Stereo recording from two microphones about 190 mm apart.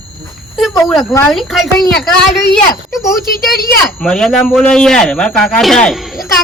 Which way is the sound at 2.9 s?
15° left (ahead or behind).